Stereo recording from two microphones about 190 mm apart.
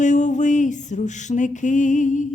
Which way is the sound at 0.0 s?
40° left (ahead or behind).